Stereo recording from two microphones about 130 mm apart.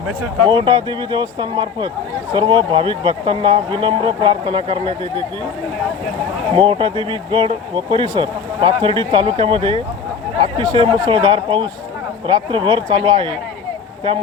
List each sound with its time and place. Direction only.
0.4 s speech: 35° right (ahead or behind)
6.6 s speech: 40° right (ahead or behind)